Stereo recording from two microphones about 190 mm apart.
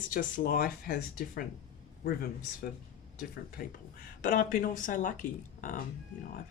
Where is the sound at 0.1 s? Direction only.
45° left (ahead or behind).